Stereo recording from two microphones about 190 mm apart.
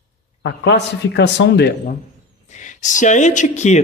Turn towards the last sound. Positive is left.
turn(degrees=40)  # may be behind; listen again after turning